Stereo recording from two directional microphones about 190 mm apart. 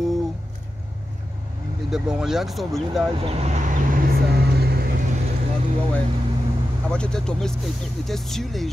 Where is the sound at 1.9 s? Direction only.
5° right (ahead or behind).